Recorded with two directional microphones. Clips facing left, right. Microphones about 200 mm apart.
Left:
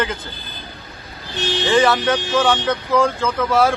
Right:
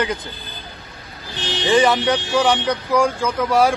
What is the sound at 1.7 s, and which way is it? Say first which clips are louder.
A man's voice: right 1 dB; 15° right (ahead or behind).